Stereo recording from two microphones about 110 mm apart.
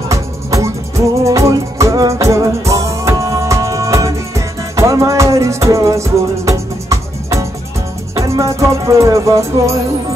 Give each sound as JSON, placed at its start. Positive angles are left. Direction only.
{"t": 0.1, "sound": "music", "side_deg": -30}